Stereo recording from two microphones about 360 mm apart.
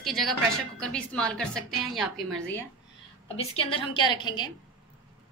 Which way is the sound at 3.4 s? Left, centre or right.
Centre.